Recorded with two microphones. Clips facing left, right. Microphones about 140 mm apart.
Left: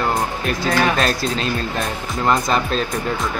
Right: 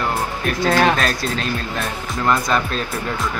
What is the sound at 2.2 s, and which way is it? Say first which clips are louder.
Speech: left 1 dB; 25° left (ahead or behind).